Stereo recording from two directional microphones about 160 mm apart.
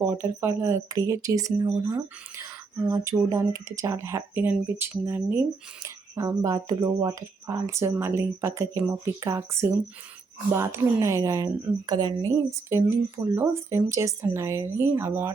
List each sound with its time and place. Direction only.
0.0 s a woman's voice: 15° right (ahead or behind)